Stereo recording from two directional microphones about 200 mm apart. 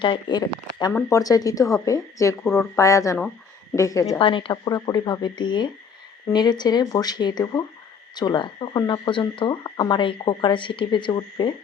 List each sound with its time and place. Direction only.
0.0 s speech: 20° left (ahead or behind)